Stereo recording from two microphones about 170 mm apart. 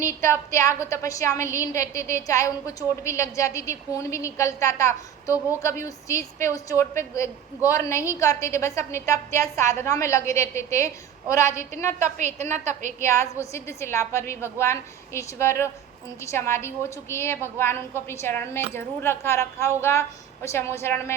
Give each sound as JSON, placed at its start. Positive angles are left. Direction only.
{"t": 0.0, "sound": "a woman's voice", "side_deg": 15}
{"t": 12.1, "sound": "a woman's voice", "side_deg": -45}
{"t": 13.0, "sound": "a woman's voice", "side_deg": 15}